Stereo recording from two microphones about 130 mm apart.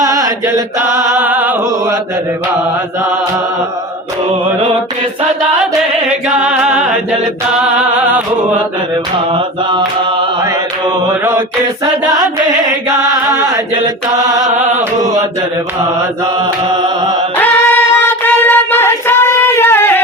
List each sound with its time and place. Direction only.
0.0 s chant: 25° right (ahead or behind)
1.1 s music: 10° right (ahead or behind)
6.1 s singing: 10° right (ahead or behind)
7.6 s music: 10° right (ahead or behind)
9.3 s mantra: 40° right (ahead or behind)
13.1 s chant: 30° right (ahead or behind)
14.4 s music: 65° right (ahead or behind)
17.3 s singing: 15° left (ahead or behind)